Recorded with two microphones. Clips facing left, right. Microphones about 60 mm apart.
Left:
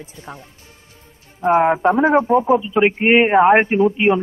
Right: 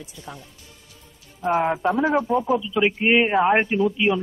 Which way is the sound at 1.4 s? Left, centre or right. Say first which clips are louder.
Left 7 dB; left.